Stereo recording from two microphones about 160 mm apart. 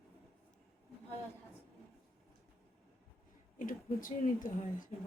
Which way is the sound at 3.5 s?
55° left (ahead or behind).